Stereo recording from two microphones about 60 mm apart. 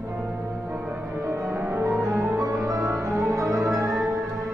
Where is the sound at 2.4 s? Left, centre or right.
Right.